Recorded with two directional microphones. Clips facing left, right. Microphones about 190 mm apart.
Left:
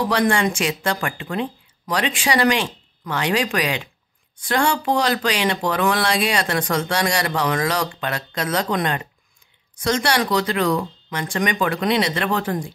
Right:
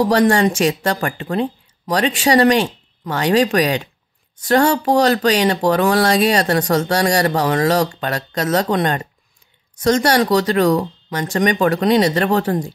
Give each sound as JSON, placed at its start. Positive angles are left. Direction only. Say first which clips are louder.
{"t": 0.0, "sound": "speech", "louder": "right 5 dB", "side_deg": -35}